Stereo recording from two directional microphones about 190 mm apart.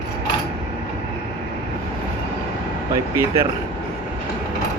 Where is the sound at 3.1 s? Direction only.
15° right (ahead or behind).